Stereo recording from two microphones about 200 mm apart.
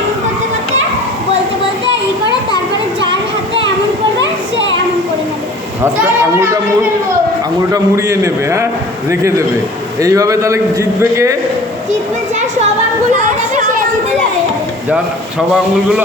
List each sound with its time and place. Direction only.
4.2 s children playing: 65° right (ahead or behind)
7.7 s a man's voice: 15° right (ahead or behind)
13.1 s chatter: 40° right (ahead or behind)
15.4 s a man's voice: centre (ahead or behind)